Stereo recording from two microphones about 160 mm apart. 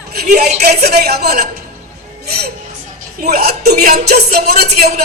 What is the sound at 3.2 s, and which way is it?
Music, 75° right (ahead or behind).